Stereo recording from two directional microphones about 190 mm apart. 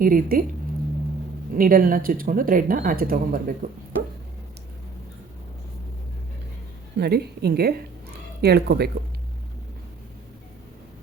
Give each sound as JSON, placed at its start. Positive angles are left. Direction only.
{"t": 0.0, "sound": "speech", "side_deg": -50}
{"t": 1.5, "sound": "speech", "side_deg": -45}
{"t": 7.0, "sound": "a woman's voice", "side_deg": -60}